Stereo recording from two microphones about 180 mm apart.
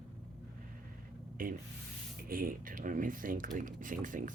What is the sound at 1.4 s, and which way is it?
Speech, 50° right (ahead or behind).